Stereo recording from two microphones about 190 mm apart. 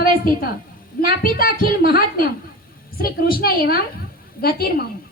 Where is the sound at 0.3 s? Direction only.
50° left (ahead or behind).